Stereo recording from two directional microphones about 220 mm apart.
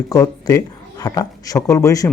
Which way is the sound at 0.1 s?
15° left (ahead or behind).